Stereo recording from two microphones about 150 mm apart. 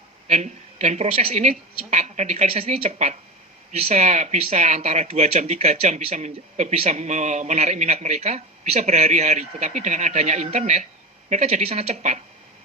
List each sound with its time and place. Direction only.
0.3 s speech: 45° right (ahead or behind)